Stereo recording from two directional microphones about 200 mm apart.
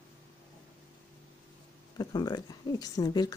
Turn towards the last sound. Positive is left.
turn(degrees=20)  # may be behind; listen again after turning